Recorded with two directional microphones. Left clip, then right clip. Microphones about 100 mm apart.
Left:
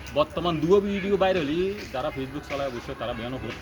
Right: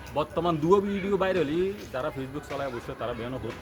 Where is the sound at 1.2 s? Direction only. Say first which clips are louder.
Left 2 dB; 40° right (ahead or behind).